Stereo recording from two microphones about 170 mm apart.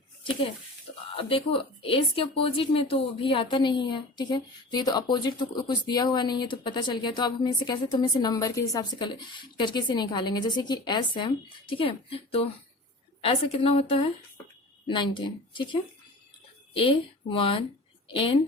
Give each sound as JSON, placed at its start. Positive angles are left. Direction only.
{"t": 1.1, "sound": "speech", "side_deg": 35}